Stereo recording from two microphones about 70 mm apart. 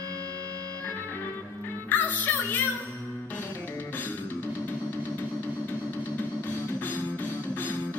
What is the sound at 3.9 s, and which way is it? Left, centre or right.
Music, left.